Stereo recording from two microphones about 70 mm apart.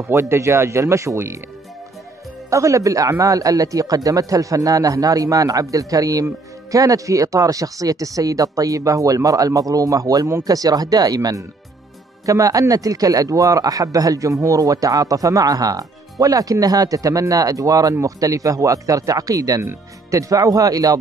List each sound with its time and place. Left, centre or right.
0.1 s speech: right
2.5 s a man's voice: right
19.6 s a man's voice: right